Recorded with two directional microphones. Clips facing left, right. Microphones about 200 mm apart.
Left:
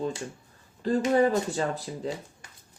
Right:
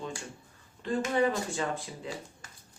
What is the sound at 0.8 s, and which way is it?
Speech, 40° left (ahead or behind).